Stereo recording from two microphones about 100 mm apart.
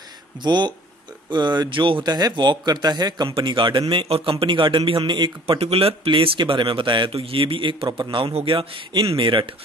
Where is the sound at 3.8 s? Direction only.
65° right (ahead or behind); by 5.6 s 50° right (ahead or behind).